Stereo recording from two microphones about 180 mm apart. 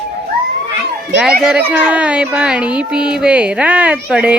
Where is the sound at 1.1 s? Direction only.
5° right (ahead or behind).